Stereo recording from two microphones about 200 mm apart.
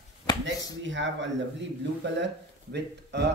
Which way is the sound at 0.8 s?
65° right (ahead or behind).